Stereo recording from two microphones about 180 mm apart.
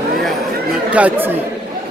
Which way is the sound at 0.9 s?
10° right (ahead or behind).